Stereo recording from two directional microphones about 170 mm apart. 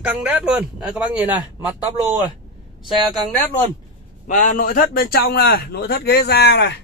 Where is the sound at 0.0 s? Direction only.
5° right (ahead or behind).